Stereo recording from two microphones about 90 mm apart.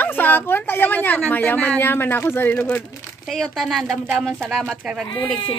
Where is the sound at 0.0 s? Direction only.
20° left (ahead or behind).